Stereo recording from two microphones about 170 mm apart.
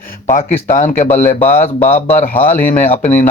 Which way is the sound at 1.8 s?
10° left (ahead or behind).